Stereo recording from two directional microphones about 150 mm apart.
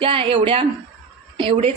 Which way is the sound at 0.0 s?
35° right (ahead or behind).